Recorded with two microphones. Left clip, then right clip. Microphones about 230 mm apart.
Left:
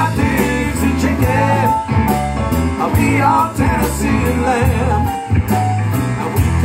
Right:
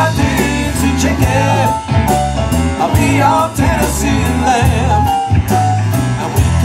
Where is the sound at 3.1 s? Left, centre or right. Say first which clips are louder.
Right 1 dB; right.